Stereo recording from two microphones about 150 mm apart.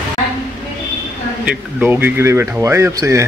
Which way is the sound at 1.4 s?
10° right (ahead or behind).